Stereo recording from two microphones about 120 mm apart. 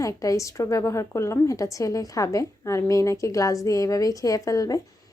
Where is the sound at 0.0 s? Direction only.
30° left (ahead or behind).